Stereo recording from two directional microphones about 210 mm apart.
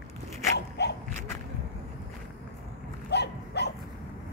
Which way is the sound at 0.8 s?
55° left (ahead or behind).